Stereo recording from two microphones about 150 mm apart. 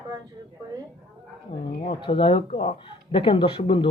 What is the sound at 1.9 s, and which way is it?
Speech, 35° left (ahead or behind).